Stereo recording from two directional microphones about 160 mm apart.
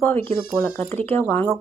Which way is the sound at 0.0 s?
15° left (ahead or behind).